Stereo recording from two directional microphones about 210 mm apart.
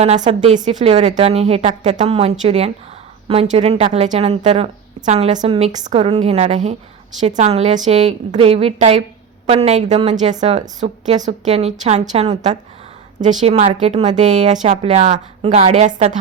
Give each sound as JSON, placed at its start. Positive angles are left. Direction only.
{"t": 0.0, "sound": "a woman's voice", "side_deg": -30}